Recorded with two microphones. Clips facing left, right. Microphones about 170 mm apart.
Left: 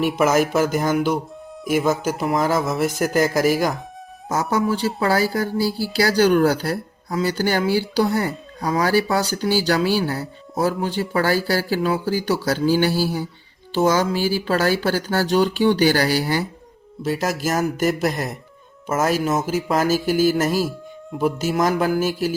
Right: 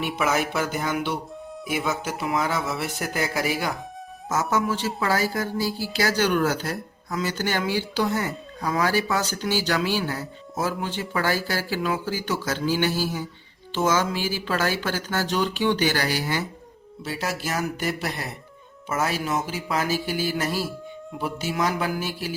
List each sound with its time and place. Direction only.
0.2 s speech: 40° left (ahead or behind)